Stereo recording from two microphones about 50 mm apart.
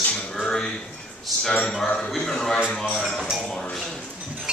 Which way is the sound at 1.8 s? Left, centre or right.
Centre.